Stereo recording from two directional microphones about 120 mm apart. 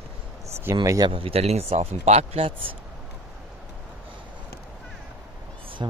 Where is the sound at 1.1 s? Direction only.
50° right (ahead or behind).